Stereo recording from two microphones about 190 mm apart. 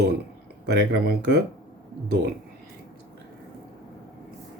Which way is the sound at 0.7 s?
55° right (ahead or behind).